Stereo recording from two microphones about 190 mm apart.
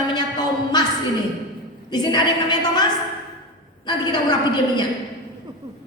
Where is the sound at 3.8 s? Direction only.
20° left (ahead or behind).